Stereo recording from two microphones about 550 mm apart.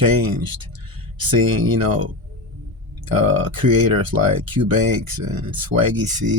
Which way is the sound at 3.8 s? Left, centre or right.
Right.